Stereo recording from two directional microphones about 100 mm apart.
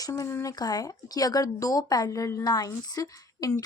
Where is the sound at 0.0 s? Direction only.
30° left (ahead or behind).